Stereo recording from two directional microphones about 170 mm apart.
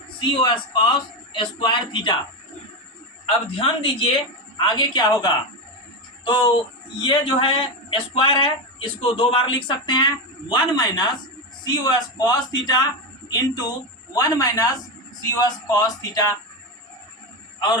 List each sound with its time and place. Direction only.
0.2 s a woman's voice: 30° left (ahead or behind)
3.2 s a woman's voice: 30° left (ahead or behind)
14.1 s a woman's voice: 20° left (ahead or behind)